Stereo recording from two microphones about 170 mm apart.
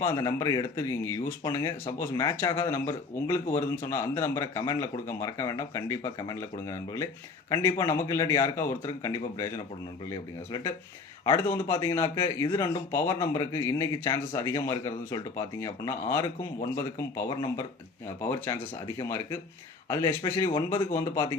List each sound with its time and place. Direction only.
0.0 s a man's voice: 15° left (ahead or behind)